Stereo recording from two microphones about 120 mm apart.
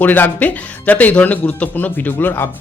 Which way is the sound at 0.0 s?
15° left (ahead or behind).